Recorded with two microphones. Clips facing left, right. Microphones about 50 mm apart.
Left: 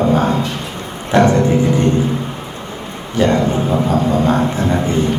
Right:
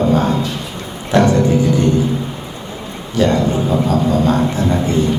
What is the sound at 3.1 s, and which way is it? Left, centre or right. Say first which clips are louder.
A man's voice: even; left.